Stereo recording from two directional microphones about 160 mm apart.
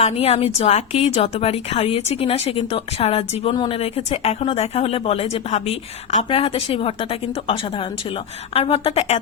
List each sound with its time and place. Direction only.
0.0 s speech: 40° left (ahead or behind)